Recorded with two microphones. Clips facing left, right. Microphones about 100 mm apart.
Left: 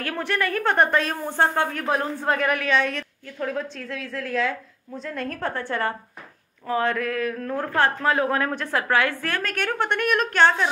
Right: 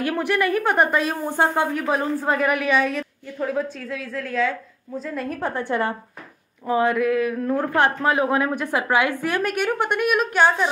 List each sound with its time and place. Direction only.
0.0 s a woman's voice: 10° right (ahead or behind)
5.4 s speech: 15° right (ahead or behind)